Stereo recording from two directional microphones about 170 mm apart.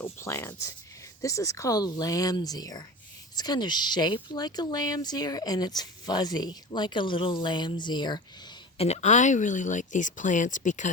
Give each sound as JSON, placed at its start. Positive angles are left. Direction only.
{"t": 0.0, "sound": "speech", "side_deg": 15}
{"t": 8.8, "sound": "speech", "side_deg": 40}